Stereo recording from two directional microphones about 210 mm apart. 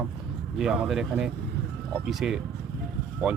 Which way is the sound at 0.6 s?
Centre (ahead or behind).